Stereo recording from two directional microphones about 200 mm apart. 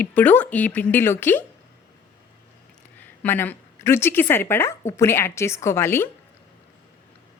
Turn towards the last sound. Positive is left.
turn(degrees=10)  # may be behind; listen again after turning